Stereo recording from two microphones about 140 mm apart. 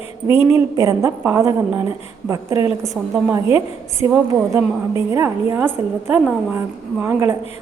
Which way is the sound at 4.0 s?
20° right (ahead or behind).